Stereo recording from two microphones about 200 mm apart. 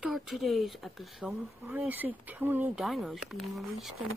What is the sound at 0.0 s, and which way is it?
Speech, centre (ahead or behind).